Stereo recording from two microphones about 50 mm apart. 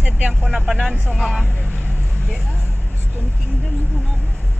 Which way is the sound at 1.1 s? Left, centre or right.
Centre.